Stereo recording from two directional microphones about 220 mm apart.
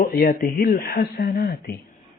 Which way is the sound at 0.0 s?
40° left (ahead or behind).